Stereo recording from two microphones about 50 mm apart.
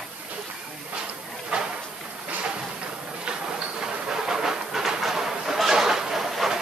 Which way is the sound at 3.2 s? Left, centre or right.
Centre.